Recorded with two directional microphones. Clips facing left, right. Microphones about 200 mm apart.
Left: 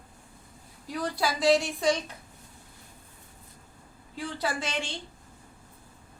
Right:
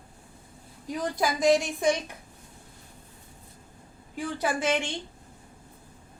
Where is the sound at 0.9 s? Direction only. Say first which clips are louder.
Right 2 dB; 20° right (ahead or behind).